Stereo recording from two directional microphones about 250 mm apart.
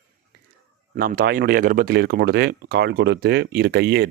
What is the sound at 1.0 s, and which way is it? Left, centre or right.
Speech, right.